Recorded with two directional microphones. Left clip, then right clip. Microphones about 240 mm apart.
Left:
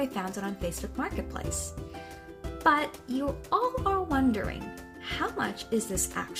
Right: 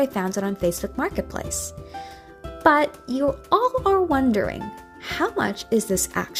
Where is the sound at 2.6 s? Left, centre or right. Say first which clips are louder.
Right 7 dB; right.